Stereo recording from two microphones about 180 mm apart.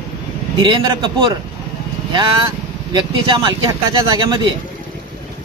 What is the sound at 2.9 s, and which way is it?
Speech, 25° right (ahead or behind).